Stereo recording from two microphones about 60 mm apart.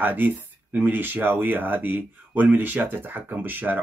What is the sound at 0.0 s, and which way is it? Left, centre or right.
Speech, right.